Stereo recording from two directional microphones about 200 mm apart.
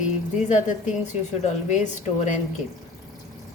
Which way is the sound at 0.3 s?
40° left (ahead or behind).